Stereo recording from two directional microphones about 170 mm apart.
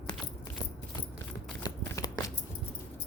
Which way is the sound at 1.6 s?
20° left (ahead or behind).